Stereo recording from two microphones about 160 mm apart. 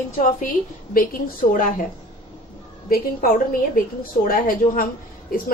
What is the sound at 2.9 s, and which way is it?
A woman's voice, 65° left (ahead or behind).